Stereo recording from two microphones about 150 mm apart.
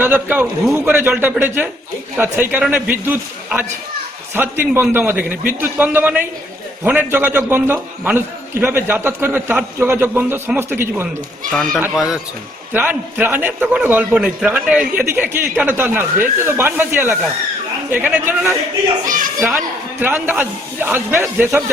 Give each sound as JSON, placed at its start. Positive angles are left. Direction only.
{"t": 0.0, "sound": "a man's voice", "side_deg": -10}
{"t": 11.9, "sound": "a man's voice", "side_deg": 0}
{"t": 19.0, "sound": "a woman's voice", "side_deg": -65}
{"t": 19.4, "sound": "a man's voice", "side_deg": -5}